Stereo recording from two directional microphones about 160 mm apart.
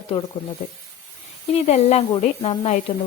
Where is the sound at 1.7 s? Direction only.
45° left (ahead or behind).